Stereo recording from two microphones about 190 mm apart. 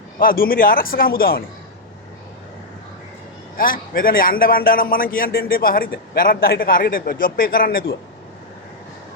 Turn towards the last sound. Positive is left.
turn(degrees=50)  # may be behind; listen again after turning